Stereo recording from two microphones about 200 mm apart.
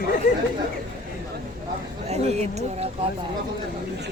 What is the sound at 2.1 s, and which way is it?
Speech, 35° right (ahead or behind).